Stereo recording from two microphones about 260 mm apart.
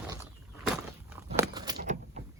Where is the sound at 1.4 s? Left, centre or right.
Centre.